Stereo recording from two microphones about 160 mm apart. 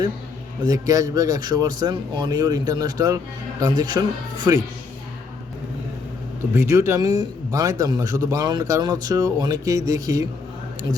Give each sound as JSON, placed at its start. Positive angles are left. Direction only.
{"t": 0.6, "sound": "a man's voice", "side_deg": -25}
{"t": 6.5, "sound": "a man's voice", "side_deg": -15}